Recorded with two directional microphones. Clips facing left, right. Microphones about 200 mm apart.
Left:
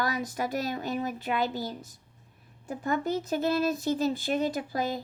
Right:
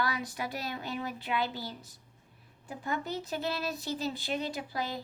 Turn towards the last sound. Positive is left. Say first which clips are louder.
# left 5 dB
turn(degrees=45)  # may be behind; listen again after turning